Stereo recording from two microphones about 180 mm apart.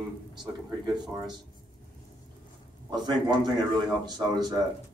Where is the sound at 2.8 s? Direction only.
20° right (ahead or behind).